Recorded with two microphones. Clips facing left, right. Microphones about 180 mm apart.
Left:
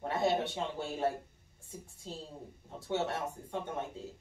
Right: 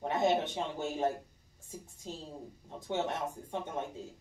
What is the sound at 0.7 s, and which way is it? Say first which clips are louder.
Speech: right 2 dB; 20° right (ahead or behind).